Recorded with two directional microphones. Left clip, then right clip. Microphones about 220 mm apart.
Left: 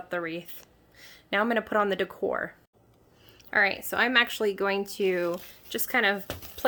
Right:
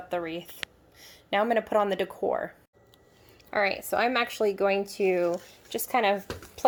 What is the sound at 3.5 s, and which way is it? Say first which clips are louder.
Speech: left 1 dB; 10° left (ahead or behind).